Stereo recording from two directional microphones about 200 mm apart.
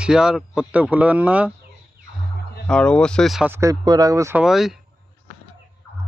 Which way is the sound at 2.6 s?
5° left (ahead or behind).